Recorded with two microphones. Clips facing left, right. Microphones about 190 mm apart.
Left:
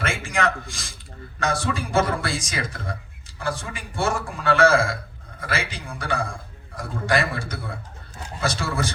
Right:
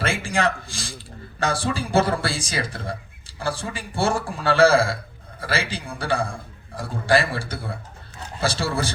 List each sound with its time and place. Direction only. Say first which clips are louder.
0.0 s a man's voice: right 2 dB; 30° right (ahead or behind)